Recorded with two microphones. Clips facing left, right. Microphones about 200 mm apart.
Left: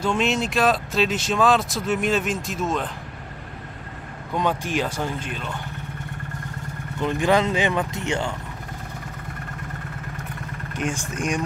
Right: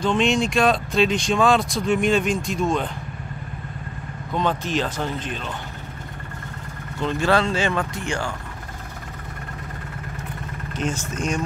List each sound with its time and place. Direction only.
0.0 s speech: 5° left (ahead or behind)
4.3 s speech: 10° left (ahead or behind)
7.0 s speech: 15° left (ahead or behind)
10.7 s speech: 15° left (ahead or behind)